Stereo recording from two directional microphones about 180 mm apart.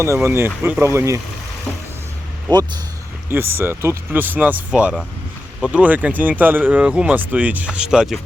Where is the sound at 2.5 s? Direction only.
25° right (ahead or behind).